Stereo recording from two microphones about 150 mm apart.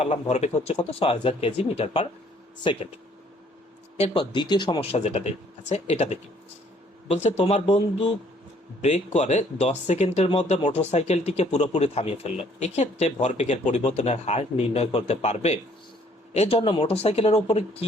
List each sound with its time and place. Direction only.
0.0 s speech: 45° left (ahead or behind)
3.9 s speech: 45° left (ahead or behind)
4.2 s speech: 30° left (ahead or behind)